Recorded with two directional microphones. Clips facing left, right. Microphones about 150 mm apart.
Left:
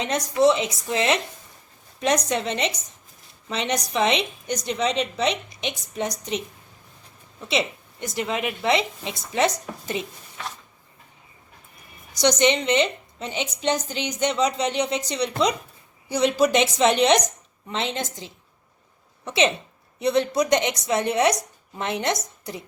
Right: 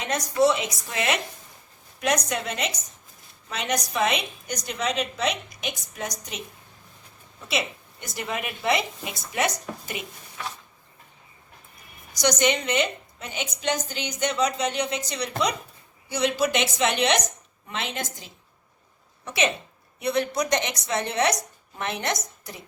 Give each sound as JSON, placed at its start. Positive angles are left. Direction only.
{"t": 0.0, "sound": "a woman's voice", "side_deg": 25}
{"t": 7.4, "sound": "a woman's voice", "side_deg": 25}
{"t": 12.2, "sound": "a woman's voice", "side_deg": 25}